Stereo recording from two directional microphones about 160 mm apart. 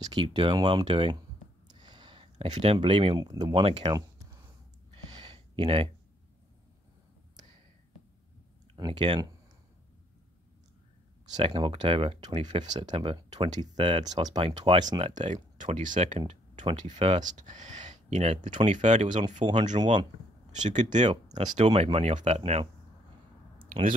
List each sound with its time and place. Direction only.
0.0 s speech: 25° right (ahead or behind)
1.7 s a sound: 25° right (ahead or behind)
2.4 s speech: 35° right (ahead or behind)
4.9 s a sound: 30° right (ahead or behind)
8.7 s speech: 30° right (ahead or behind)
11.4 s speech: 35° right (ahead or behind)
15.1 s speech: 50° right (ahead or behind)
17.2 s speech: 50° right (ahead or behind)
19.8 s speech: 30° right (ahead or behind)
20.6 s speech: 45° right (ahead or behind)
23.6 s a sound: 35° right (ahead or behind)